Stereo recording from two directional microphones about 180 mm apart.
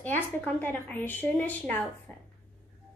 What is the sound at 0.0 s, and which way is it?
A woman's voice, 10° left (ahead or behind).